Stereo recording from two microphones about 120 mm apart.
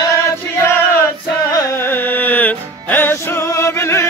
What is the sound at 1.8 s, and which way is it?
Music, 15° left (ahead or behind).